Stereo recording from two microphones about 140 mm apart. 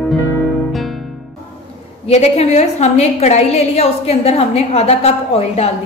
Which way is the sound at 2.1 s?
50° left (ahead or behind).